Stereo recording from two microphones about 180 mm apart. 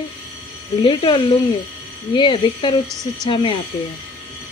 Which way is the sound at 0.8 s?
25° left (ahead or behind).